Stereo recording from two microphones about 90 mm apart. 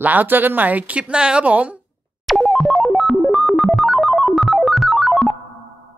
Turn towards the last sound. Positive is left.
turn(degrees=0)  # may be behind; listen again after turning